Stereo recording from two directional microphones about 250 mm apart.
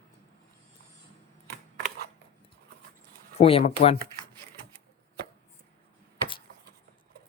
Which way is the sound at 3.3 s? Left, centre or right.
Left.